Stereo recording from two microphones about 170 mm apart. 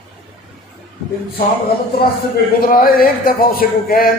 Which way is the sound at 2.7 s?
55° left (ahead or behind).